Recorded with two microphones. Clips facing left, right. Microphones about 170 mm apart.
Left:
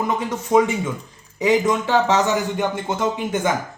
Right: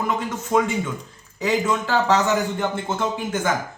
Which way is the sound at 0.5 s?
20° left (ahead or behind).